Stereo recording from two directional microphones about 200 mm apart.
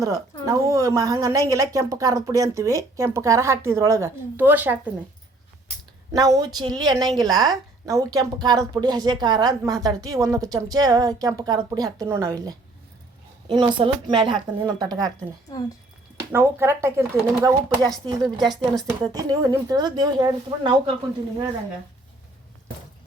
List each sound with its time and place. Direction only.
0.0 s a woman's voice: 15° right (ahead or behind)
6.1 s a woman's voice: 20° right (ahead or behind)
16.3 s a woman's voice: 10° right (ahead or behind)